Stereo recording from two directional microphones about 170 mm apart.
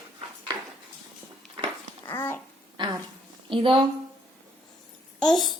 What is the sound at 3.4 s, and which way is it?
Speech, 30° right (ahead or behind).